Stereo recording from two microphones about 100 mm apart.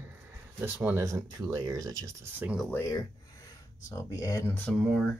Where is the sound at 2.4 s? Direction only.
20° right (ahead or behind).